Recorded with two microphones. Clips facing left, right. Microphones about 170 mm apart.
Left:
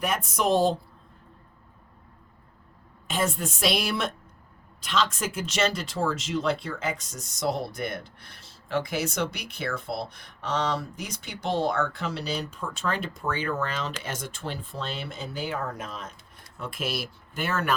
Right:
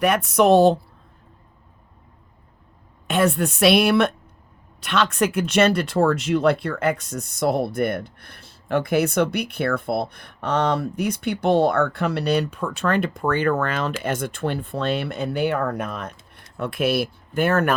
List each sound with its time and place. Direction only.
0.0 s speech: 65° right (ahead or behind)
3.1 s speech: 65° right (ahead or behind)